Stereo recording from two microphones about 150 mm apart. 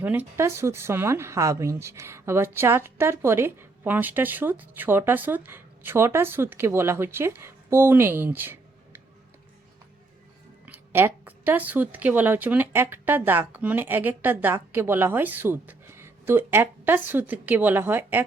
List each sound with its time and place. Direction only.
0.0 s speech: 10° right (ahead or behind)
10.7 s speech: 15° right (ahead or behind)